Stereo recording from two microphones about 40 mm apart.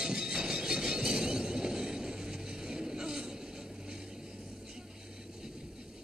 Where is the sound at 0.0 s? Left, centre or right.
Centre.